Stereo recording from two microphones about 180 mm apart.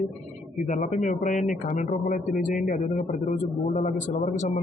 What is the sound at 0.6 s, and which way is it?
Speech, 45° left (ahead or behind).